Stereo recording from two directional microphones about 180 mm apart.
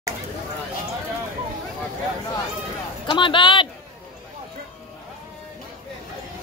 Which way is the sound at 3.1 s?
25° left (ahead or behind).